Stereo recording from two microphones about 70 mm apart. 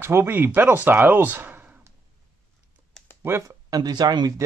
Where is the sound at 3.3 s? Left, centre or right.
Right.